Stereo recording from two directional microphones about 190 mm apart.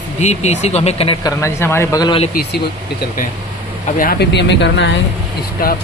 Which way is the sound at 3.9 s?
55° left (ahead or behind).